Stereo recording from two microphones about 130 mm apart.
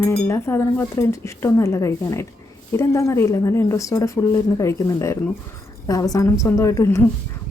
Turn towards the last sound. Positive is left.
turn(degrees=25)  # may be behind; listen again after turning